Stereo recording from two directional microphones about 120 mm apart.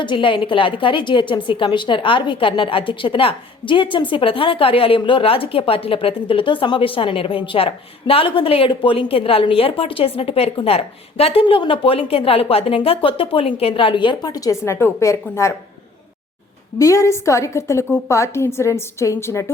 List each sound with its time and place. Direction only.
0.0 s a woman's voice: 45° left (ahead or behind); by 15.5 s 25° left (ahead or behind)
16.7 s a woman's voice: 25° left (ahead or behind)